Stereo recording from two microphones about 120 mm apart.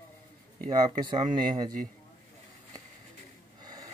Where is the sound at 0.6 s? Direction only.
35° right (ahead or behind).